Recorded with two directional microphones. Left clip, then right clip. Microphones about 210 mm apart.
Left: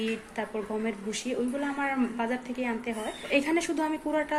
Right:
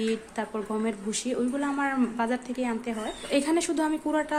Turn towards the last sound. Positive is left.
turn(degrees=-20)  # may be behind; listen again after turning